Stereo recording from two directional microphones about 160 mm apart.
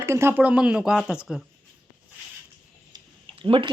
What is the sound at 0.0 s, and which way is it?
Speech, 15° right (ahead or behind).